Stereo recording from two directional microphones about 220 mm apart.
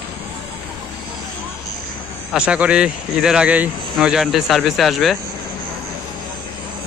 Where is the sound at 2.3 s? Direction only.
5° right (ahead or behind).